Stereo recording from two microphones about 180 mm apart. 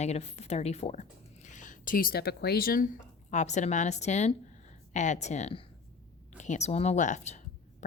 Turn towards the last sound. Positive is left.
turn(degrees=40)  # may be behind; listen again after turning